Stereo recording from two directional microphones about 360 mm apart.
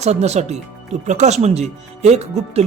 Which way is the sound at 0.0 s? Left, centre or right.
Centre.